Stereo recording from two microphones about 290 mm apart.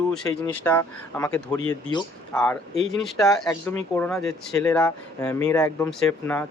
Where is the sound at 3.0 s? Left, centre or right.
Centre.